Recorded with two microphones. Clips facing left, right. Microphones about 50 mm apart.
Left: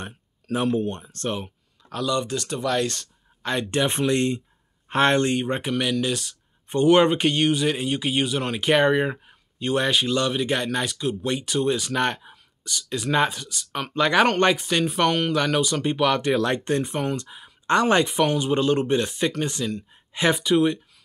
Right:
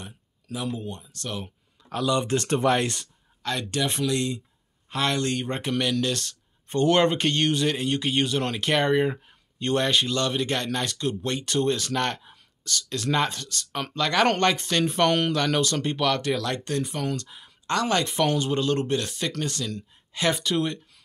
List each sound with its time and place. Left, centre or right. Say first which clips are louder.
0.0 s speech: left 6 dB; left
1.9 s speech: even; centre
2.2 s speech: right 4 dB; right
2.7 s speech: even; right
3.4 s speech: left 4 dB; left
5.3 s speech: left 3 dB; centre
13.9 s speech: left 3 dB; centre
17.6 s speech: left 5 dB; left
18.0 s speech: left 2 dB; centre